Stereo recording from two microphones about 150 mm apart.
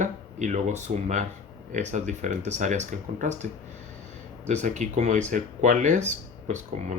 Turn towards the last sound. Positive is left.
turn(degrees=-55)  # may be behind; listen again after turning